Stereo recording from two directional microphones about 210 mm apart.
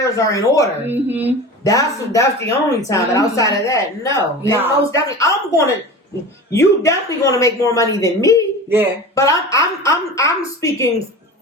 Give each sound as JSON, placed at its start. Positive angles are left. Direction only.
{"t": 0.0, "sound": "a woman's voice", "side_deg": 15}
{"t": 0.9, "sound": "speech", "side_deg": -10}
{"t": 1.6, "sound": "a woman's voice", "side_deg": 15}